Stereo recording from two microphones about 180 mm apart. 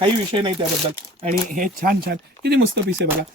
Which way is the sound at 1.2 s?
50° right (ahead or behind).